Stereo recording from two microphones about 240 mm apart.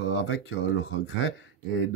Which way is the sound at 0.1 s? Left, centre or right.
Left.